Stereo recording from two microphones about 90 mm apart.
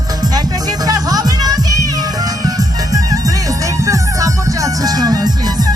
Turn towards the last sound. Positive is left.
turn(degrees=-45)  # may be behind; listen again after turning